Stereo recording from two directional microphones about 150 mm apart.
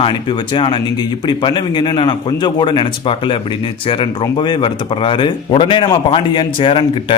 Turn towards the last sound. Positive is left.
turn(degrees=35)  # may be behind; listen again after turning